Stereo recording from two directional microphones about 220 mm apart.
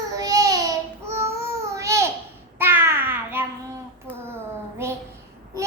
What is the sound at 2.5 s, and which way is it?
Babbling, 10° right (ahead or behind).